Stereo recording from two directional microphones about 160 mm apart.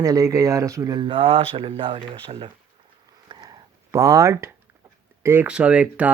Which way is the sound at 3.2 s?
25° right (ahead or behind).